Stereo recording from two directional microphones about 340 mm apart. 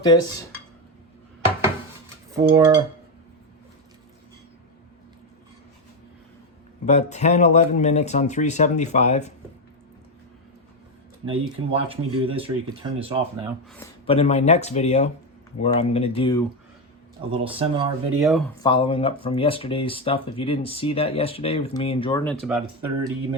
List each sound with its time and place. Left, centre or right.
0.0 s speech: centre
2.3 s speech: centre
6.8 s speech: centre
11.5 s speech: centre
14.1 s speech: centre
17.3 s speech: centre
18.3 s speech: centre
18.6 s speech: centre